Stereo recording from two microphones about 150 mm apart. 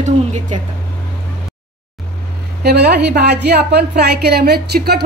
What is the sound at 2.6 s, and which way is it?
A woman's voice, 90° right.